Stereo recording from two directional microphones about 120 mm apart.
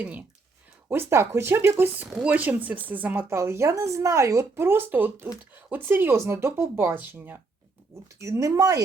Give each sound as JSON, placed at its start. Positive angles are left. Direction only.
{"t": 0.0, "sound": "speech", "side_deg": -10}
{"t": 2.0, "sound": "speech", "side_deg": -5}
{"t": 2.3, "sound": "speech", "side_deg": -15}
{"t": 8.2, "sound": "speech", "side_deg": -25}